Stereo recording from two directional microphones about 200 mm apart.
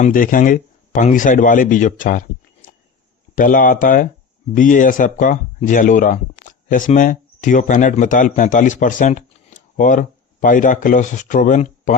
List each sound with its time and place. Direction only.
0.0 s speech: 45° left (ahead or behind)
3.3 s speech: 40° left (ahead or behind)